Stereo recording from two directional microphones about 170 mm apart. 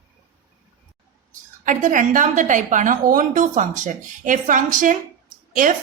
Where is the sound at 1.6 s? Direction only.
50° right (ahead or behind).